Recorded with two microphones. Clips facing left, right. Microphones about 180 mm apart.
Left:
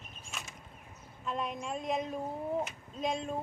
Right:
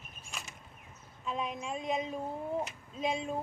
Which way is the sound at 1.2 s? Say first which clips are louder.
Even; centre (ahead or behind).